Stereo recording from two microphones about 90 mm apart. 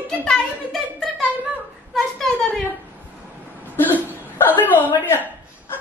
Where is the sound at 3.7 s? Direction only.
20° left (ahead or behind).